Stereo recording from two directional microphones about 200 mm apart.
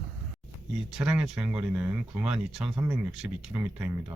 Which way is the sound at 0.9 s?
5° right (ahead or behind).